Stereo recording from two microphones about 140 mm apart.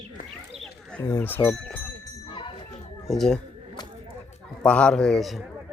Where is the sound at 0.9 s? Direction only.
15° left (ahead or behind).